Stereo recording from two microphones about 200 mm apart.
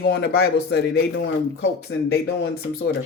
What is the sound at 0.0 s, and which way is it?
Speech, 55° left (ahead or behind).